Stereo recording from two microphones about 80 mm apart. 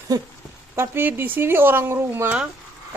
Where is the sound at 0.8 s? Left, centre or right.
Right.